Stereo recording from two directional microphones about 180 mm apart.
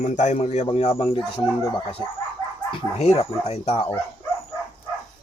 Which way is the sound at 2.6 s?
35° left (ahead or behind).